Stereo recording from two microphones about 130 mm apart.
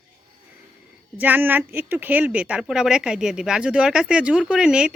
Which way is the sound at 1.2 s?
15° right (ahead or behind).